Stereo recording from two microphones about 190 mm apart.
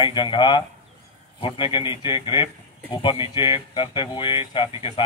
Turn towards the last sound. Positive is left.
turn(degrees=25)  # may be behind; listen again after turning